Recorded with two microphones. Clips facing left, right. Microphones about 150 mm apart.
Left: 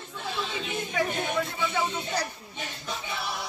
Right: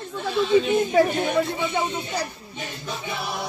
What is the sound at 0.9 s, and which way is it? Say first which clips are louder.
Speech: right 6 dB; 25° right (ahead or behind).